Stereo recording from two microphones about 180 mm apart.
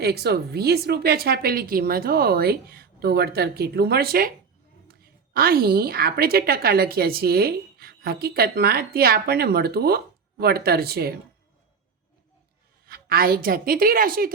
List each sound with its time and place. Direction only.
0.0 s a woman's voice: 60° right (ahead or behind)
12.8 s a woman's voice: 55° right (ahead or behind)